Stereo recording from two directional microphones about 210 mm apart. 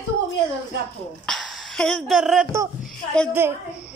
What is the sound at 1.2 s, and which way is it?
A woman's voice, centre (ahead or behind).